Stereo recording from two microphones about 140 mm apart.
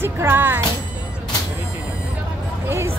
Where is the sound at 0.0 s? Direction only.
15° right (ahead or behind).